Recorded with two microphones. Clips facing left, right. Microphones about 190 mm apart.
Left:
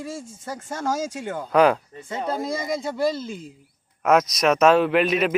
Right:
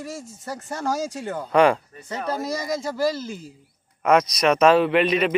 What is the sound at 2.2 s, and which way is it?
Speech, 25° left (ahead or behind).